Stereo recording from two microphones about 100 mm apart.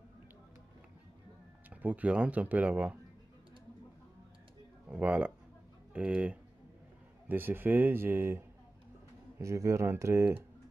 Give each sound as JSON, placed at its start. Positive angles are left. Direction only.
{"t": 1.8, "sound": "speech", "side_deg": -15}
{"t": 4.8, "sound": "speech", "side_deg": -15}